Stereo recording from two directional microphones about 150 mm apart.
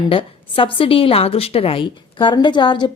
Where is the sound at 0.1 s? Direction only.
35° left (ahead or behind).